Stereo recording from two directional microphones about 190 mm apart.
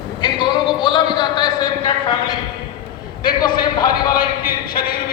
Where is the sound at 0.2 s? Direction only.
25° left (ahead or behind).